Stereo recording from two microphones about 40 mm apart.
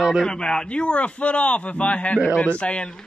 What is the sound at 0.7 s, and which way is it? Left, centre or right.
Speech, left.